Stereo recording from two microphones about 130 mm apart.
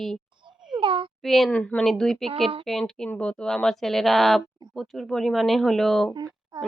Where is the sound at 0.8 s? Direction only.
40° right (ahead or behind).